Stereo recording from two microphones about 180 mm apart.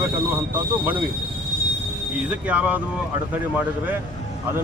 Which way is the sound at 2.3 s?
10° right (ahead or behind).